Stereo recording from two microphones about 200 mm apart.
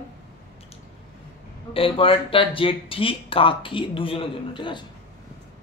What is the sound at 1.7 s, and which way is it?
Speech, 25° left (ahead or behind).